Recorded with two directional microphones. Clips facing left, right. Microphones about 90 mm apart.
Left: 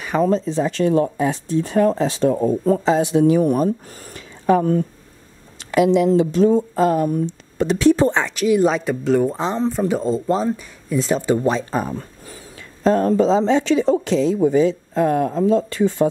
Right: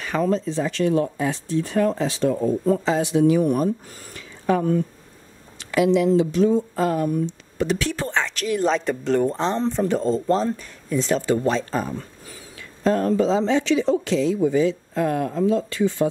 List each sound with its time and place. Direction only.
0.2 s speech: 25° left (ahead or behind)
0.7 s speech: 35° left (ahead or behind)
1.1 s speech: 20° left (ahead or behind)
2.3 s speech: 45° left (ahead or behind)
2.8 s speech: 25° left (ahead or behind)
3.2 s speech: 35° left (ahead or behind)
5.9 s speech: 45° left (ahead or behind)
6.8 s speech: 25° left (ahead or behind)
12.8 s speech: 30° left (ahead or behind)
14.0 s speech: 30° left (ahead or behind)